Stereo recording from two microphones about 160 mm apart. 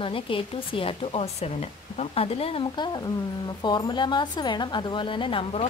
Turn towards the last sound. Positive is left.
turn(degrees=35)  # may be behind; listen again after turning